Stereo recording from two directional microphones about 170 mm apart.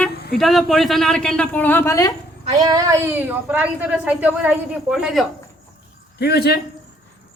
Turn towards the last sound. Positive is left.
turn(degrees=70)  # may be behind; listen again after turning